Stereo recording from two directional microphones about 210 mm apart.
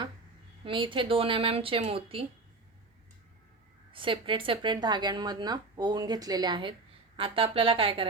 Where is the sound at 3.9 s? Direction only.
25° right (ahead or behind).